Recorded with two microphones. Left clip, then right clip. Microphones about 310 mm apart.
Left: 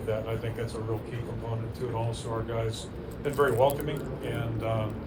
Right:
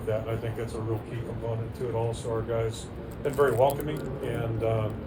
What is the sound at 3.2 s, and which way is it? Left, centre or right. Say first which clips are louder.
Speech: right 1 dB; left.